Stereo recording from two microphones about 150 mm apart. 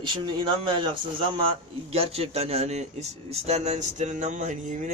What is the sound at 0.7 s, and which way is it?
A man's voice, 35° right (ahead or behind).